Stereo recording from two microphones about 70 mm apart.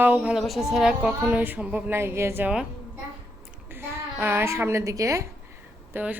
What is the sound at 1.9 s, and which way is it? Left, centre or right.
Speech, right.